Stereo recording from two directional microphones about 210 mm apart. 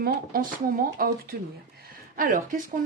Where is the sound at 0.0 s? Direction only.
45° right (ahead or behind).